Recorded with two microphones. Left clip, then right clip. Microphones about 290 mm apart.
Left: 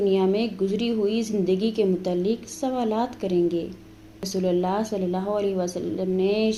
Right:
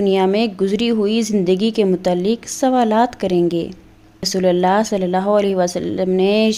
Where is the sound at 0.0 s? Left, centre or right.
Right.